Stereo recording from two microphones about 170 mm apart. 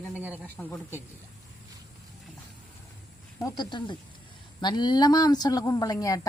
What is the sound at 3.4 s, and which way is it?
A woman's voice, 25° left (ahead or behind).